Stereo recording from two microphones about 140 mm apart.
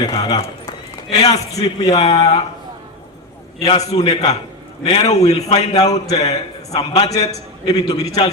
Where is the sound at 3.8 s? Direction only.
50° left (ahead or behind).